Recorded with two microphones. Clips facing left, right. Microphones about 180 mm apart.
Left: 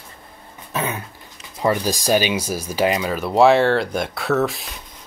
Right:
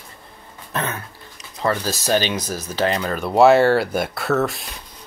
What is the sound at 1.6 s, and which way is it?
Speech, 15° left (ahead or behind).